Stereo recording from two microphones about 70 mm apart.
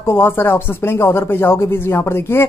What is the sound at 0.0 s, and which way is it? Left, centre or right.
A man's voice, left.